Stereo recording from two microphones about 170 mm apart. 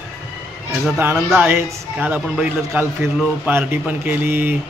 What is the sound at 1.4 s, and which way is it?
A man's voice, 15° right (ahead or behind).